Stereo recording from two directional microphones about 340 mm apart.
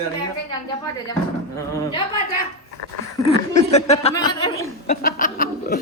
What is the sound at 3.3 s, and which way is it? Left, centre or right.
Speech, centre.